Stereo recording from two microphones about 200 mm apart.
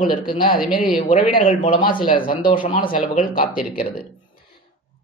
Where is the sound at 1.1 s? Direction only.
40° left (ahead or behind).